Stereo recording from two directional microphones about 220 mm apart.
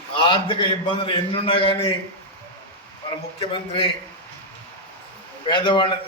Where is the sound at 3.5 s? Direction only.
25° left (ahead or behind).